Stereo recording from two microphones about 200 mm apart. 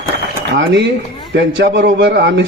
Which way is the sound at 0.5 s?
60° right (ahead or behind).